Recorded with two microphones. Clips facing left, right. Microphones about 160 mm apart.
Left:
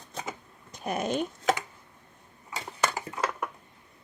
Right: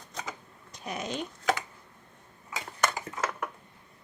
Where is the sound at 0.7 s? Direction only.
50° left (ahead or behind).